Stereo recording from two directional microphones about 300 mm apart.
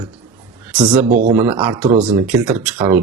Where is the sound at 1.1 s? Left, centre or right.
Right.